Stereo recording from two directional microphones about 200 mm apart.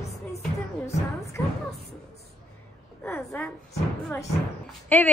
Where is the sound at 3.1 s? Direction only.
10° left (ahead or behind).